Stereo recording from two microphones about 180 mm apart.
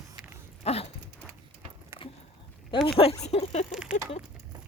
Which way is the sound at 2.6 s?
25° left (ahead or behind).